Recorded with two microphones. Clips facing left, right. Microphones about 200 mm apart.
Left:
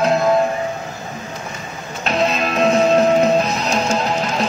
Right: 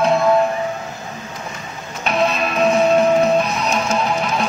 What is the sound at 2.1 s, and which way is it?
Music, 30° left (ahead or behind).